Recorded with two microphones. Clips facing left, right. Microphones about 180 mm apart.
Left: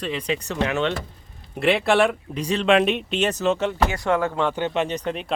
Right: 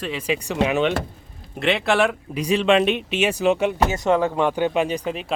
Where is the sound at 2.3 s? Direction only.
10° right (ahead or behind).